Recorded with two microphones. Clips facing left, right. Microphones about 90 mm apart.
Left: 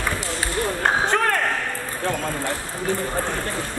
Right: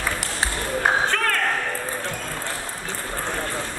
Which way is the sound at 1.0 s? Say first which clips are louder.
Left 3 dB; 20° left (ahead or behind).